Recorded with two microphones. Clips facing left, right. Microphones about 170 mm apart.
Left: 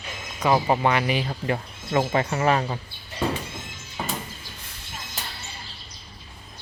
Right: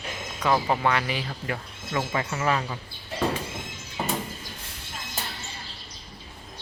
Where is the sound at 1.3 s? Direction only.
30° left (ahead or behind).